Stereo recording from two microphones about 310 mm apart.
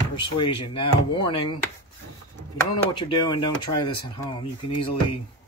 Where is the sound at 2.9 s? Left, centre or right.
Centre.